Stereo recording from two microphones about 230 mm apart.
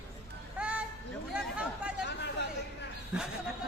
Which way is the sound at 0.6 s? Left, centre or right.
Centre.